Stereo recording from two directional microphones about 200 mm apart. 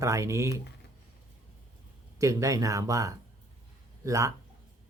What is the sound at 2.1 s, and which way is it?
Speech, 15° right (ahead or behind).